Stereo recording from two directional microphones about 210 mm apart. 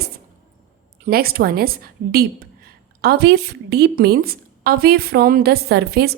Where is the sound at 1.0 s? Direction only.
45° right (ahead or behind).